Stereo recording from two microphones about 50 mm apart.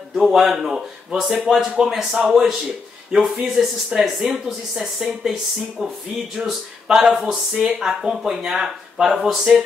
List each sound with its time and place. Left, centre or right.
0.1 s speech: centre
5.8 s speech: centre
6.3 s speech: centre